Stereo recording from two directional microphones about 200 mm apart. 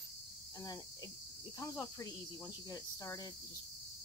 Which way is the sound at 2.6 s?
15° left (ahead or behind).